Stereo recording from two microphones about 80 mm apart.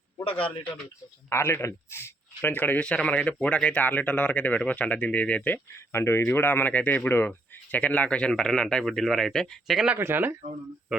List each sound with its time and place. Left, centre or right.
0.3 s a man's voice: left
1.3 s a man's voice: left
5.9 s speech: left; by 9.7 s centre
9.7 s speech: centre
10.0 s speech: right